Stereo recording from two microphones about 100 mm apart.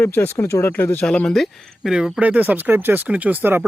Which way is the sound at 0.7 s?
15° left (ahead or behind).